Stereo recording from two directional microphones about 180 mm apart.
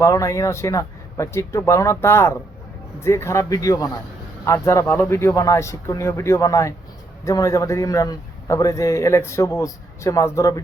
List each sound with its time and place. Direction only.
0.0 s a man's voice: 15° left (ahead or behind)